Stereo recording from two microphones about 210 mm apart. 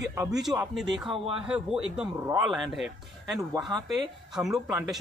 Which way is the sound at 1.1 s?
25° right (ahead or behind).